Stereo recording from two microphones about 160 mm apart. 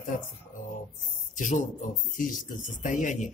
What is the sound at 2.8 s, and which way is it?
Speech, 55° left (ahead or behind).